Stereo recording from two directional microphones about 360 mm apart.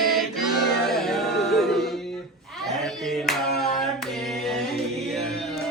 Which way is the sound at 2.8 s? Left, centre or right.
Centre.